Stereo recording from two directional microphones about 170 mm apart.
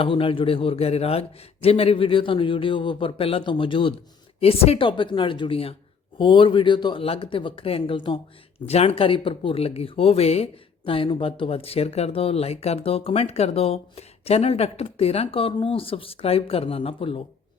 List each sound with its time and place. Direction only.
0.0 s speech: 30° left (ahead or behind)